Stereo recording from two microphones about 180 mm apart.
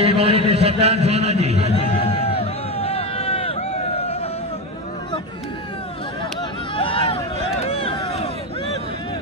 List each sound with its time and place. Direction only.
0.0 s a man's voice: 35° right (ahead or behind)
1.9 s a sound: 35° left (ahead or behind)
6.7 s vehicle: 30° left (ahead or behind)